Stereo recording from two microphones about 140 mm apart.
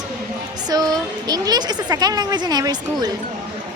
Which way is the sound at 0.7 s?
30° right (ahead or behind).